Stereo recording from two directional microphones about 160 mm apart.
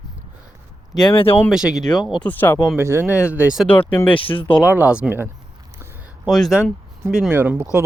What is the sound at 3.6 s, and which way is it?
Speech, 10° left (ahead or behind).